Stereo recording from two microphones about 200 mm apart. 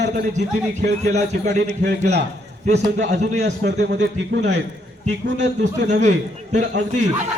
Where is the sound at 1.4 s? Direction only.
60° right (ahead or behind).